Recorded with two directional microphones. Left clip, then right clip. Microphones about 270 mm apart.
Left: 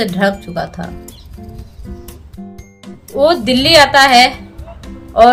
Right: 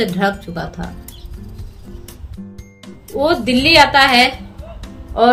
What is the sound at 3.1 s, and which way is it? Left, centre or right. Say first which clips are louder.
Speech: left 4 dB; centre.